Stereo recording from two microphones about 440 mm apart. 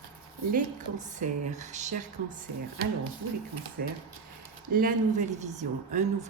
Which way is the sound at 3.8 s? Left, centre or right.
Right.